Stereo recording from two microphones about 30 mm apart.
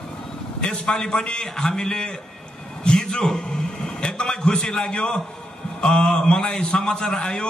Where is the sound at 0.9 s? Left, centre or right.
Left.